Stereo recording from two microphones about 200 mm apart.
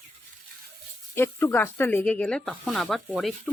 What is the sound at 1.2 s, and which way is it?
Speech, 10° left (ahead or behind).